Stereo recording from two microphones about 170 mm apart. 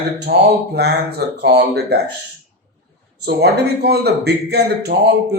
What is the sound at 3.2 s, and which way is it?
Speech, 70° right (ahead or behind).